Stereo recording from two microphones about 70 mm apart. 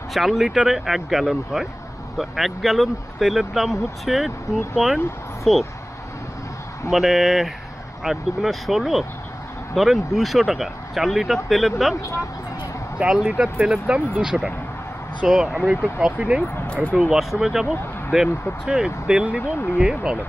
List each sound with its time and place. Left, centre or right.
0.1 s speech: centre
5.4 s speech: centre
6.9 s speech: centre
13.0 s speech: centre
16.6 s speech: centre
16.9 s speech: centre